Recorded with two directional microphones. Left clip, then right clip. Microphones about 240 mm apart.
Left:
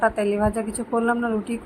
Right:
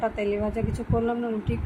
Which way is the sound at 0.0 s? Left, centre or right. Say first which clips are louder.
Left 6 dB; centre.